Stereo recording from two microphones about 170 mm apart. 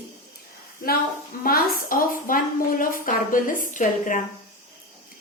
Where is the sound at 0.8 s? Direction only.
55° left (ahead or behind).